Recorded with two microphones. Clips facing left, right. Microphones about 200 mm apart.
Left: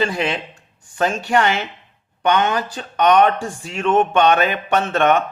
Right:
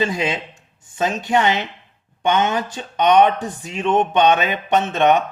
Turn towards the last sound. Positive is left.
turn(degrees=-15)  # may be behind; listen again after turning